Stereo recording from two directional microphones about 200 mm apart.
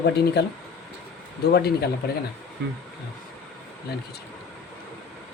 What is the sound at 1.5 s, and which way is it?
Speech, 50° left (ahead or behind).